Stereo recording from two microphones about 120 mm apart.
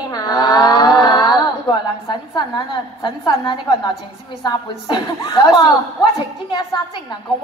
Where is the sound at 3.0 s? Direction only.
40° left (ahead or behind).